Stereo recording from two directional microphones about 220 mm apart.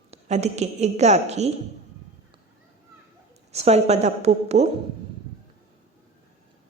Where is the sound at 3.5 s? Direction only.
30° right (ahead or behind).